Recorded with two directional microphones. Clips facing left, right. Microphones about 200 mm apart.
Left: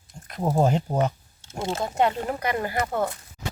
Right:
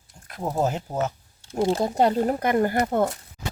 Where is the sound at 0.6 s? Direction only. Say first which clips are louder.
Left 3 dB; 5° right (ahead or behind).